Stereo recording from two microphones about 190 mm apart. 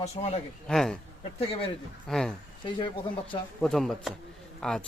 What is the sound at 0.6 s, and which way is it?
Speech, 5° left (ahead or behind).